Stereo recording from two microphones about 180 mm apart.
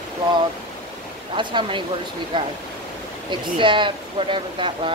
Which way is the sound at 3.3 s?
25° right (ahead or behind).